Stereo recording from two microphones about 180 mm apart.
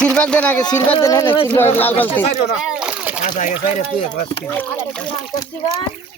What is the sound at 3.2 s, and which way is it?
Speech, 40° left (ahead or behind).